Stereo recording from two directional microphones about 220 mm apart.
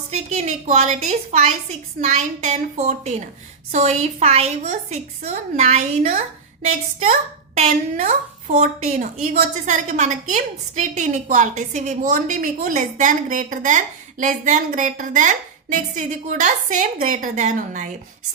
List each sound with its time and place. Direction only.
0.1 s a woman's voice: 30° right (ahead or behind)